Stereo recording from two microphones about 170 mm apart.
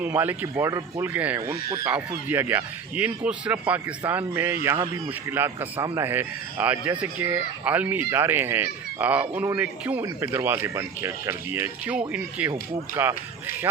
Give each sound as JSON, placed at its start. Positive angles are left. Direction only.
{"t": 0.0, "sound": "speech", "side_deg": -10}